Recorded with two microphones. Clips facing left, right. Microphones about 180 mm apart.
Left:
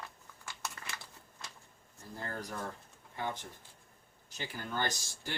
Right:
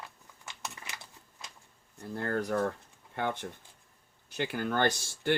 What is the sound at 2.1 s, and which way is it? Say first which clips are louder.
Speech: right 10 dB; 65° right (ahead or behind).